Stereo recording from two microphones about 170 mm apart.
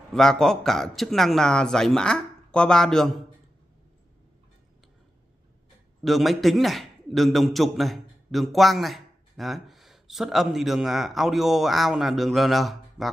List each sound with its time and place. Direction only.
0.1 s speech: 5° left (ahead or behind)
6.0 s a man's voice: centre (ahead or behind)